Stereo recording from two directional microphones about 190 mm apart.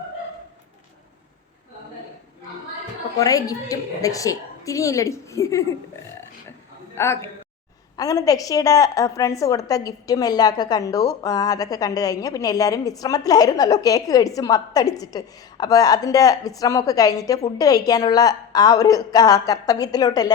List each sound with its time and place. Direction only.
3.2 s a woman's voice: 20° left (ahead or behind)
6.9 s a woman's voice: 15° left (ahead or behind)